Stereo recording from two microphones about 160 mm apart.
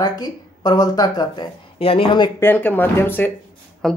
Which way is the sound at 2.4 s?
10° left (ahead or behind).